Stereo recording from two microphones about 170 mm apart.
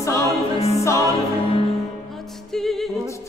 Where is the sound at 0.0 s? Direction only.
20° left (ahead or behind).